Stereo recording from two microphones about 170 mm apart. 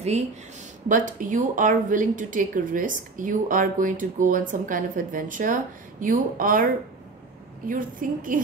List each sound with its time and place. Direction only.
0.8 s a woman's voice: 50° right (ahead or behind)